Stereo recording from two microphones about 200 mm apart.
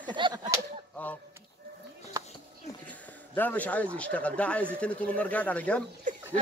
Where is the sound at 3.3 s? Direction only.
10° left (ahead or behind).